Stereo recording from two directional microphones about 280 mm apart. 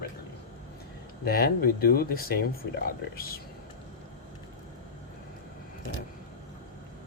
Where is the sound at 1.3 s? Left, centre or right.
Left.